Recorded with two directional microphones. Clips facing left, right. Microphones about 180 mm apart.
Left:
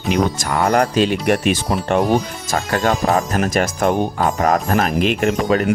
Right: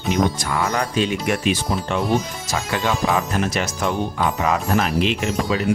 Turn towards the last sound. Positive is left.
turn(degrees=55)  # may be behind; listen again after turning